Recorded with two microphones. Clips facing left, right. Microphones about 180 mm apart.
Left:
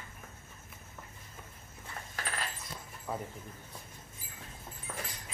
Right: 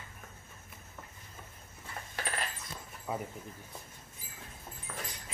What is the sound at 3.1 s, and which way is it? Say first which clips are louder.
Speech: right 1 dB; 10° right (ahead or behind).